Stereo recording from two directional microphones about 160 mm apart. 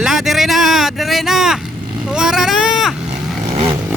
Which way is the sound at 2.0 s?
5° right (ahead or behind).